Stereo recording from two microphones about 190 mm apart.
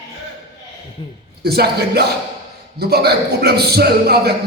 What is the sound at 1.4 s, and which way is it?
Music, 55° right (ahead or behind).